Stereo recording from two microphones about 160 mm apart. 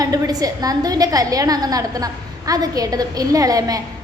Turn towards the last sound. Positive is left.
turn(degrees=-20)  # may be behind; listen again after turning